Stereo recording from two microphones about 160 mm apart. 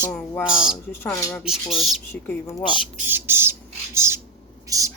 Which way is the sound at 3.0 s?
15° right (ahead or behind).